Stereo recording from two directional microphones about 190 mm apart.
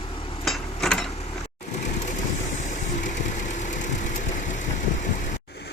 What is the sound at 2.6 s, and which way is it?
Vehicle, 40° left (ahead or behind).